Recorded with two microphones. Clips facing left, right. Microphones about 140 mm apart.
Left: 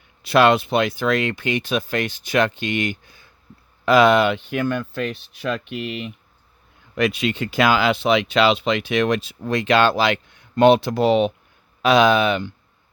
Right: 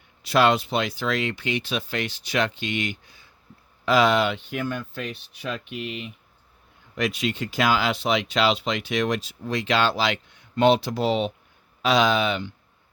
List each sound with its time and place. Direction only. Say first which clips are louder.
0.3 s speech: left 4 dB; 60° left (ahead or behind); by 6.1 s 90° left
6.9 s speech: left 5 dB; 65° left (ahead or behind)